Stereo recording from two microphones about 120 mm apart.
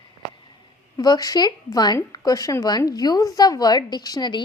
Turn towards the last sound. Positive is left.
turn(degrees=35)  # may be behind; listen again after turning